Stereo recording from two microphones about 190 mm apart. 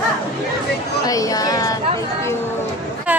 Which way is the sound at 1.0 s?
20° left (ahead or behind).